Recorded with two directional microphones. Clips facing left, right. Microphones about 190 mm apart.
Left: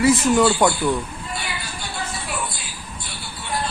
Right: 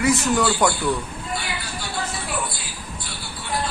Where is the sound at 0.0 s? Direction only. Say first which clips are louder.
Left 4 dB; 25° left (ahead or behind).